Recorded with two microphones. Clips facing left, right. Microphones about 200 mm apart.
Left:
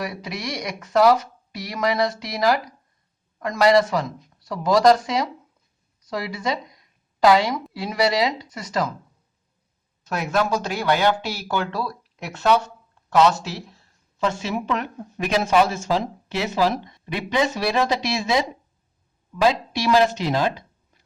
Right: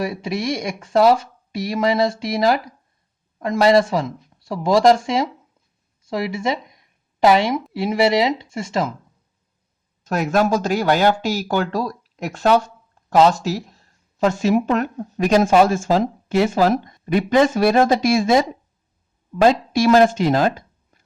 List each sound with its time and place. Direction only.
0.0 s speech: 25° right (ahead or behind)
6.0 s a sound: 25° right (ahead or behind)
7.7 s speech: 25° right (ahead or behind)
10.0 s speech: 45° right (ahead or behind)